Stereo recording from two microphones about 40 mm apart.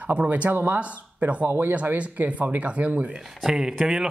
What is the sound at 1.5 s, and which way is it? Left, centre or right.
Speech, right.